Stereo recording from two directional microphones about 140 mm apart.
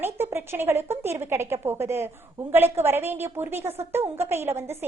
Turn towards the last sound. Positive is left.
turn(degrees=-15)  # may be behind; listen again after turning